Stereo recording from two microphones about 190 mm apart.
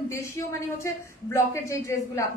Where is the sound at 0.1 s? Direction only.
15° left (ahead or behind).